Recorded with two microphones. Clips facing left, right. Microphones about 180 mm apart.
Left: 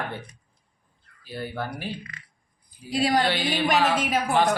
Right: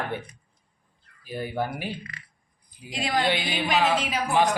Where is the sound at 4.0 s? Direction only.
50° left (ahead or behind).